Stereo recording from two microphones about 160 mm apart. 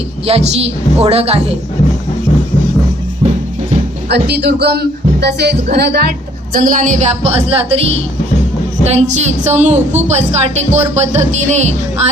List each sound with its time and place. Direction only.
0.3 s a woman's voice: 40° right (ahead or behind)
4.1 s a woman's voice: 90° right; by 11.7 s 45° right (ahead or behind)